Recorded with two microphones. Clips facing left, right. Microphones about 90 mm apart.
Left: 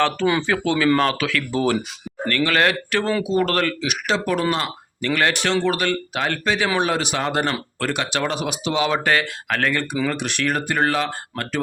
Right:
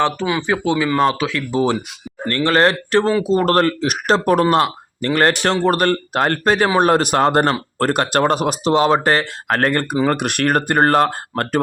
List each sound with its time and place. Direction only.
0.3 s speech: 15° right (ahead or behind)
2.2 s speech: 30° right (ahead or behind); by 4.7 s 50° right (ahead or behind)
4.9 s speech: 35° right (ahead or behind)